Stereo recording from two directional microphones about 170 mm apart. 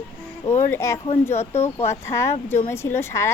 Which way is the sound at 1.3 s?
40° left (ahead or behind).